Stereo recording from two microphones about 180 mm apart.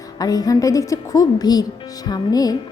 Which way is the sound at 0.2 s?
20° left (ahead or behind).